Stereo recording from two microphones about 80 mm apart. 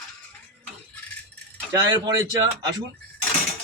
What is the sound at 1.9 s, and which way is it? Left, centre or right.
Speech, right.